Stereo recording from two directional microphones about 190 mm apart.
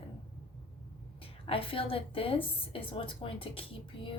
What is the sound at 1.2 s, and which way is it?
A woman's voice, 30° left (ahead or behind).